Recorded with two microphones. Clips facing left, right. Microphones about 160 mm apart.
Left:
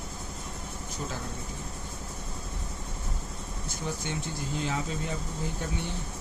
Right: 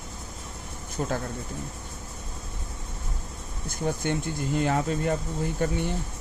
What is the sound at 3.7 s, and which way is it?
Speech, 55° right (ahead or behind).